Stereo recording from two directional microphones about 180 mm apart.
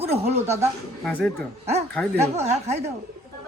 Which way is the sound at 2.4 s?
35° right (ahead or behind).